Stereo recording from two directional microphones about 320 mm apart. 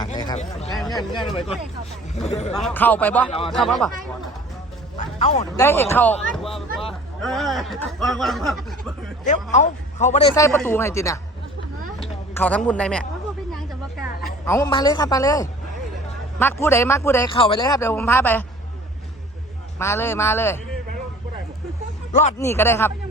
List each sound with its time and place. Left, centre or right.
0.0 s a sound: centre
1.1 s a man's voice: centre
2.6 s speech: centre
4.9 s music: centre
5.5 s speech: centre
9.2 s speech: left
12.3 s speech: centre
14.1 s a sound: left
14.4 s speech: centre
19.8 s speech: centre
22.4 s speech: centre